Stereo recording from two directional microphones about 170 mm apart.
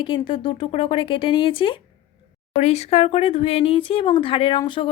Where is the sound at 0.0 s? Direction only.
30° left (ahead or behind).